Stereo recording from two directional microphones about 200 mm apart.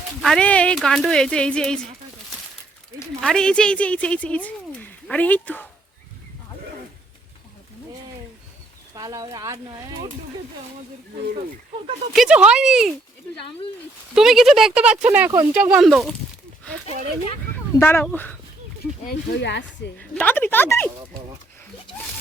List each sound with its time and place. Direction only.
0.2 s speech: 5° left (ahead or behind)
3.2 s a woman's voice: 5° left (ahead or behind)
9.0 s speech: 20° right (ahead or behind)
12.1 s speech: 5° right (ahead or behind)
14.2 s speech: centre (ahead or behind)
17.5 s speech: 10° left (ahead or behind)
19.0 s speech: 60° left (ahead or behind)
20.0 s speech: 10° left (ahead or behind)